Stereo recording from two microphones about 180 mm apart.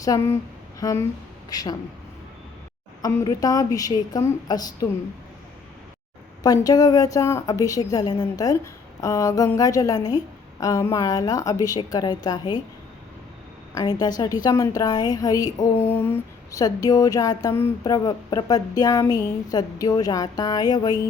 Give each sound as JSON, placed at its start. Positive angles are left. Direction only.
{"t": 0.0, "sound": "a woman's voice", "side_deg": 20}
{"t": 3.0, "sound": "a woman's voice", "side_deg": 20}
{"t": 6.4, "sound": "a woman's voice", "side_deg": 20}
{"t": 13.7, "sound": "a woman's voice", "side_deg": 20}